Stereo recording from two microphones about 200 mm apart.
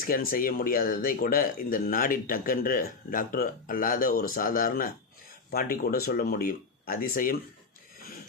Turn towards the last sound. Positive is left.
turn(degrees=45)  # may be behind; listen again after turning